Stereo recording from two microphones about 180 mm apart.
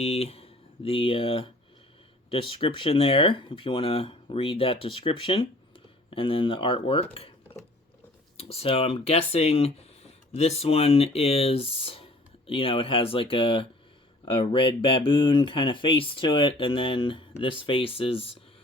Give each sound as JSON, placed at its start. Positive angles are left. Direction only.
{"t": 0.0, "sound": "speech", "side_deg": 35}
{"t": 8.4, "sound": "speech", "side_deg": 35}